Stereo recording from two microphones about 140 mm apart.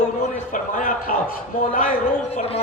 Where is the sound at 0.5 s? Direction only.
80° left.